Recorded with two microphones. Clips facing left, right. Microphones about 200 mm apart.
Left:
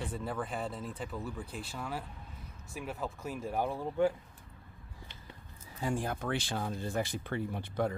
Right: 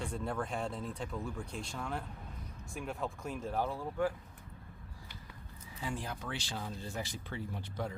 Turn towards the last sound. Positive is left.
turn(degrees=55)  # may be behind; listen again after turning